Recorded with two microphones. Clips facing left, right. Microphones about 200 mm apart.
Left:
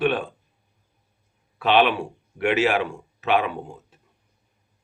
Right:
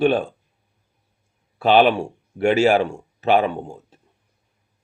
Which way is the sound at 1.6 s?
35° right (ahead or behind).